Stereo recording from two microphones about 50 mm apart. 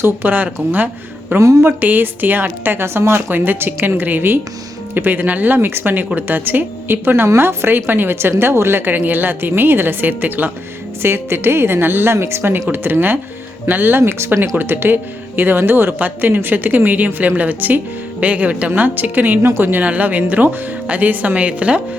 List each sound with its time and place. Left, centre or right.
0.0 s speech: right
1.3 s a woman's voice: right
11.0 s a woman's voice: right
14.0 s speech: right
14.6 s a woman's voice: right
19.8 s speech: right